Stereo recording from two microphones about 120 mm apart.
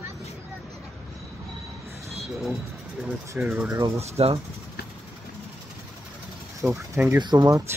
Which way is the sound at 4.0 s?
60° right (ahead or behind).